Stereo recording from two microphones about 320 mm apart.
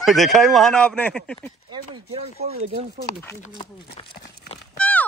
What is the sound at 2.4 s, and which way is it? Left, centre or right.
Speech, centre.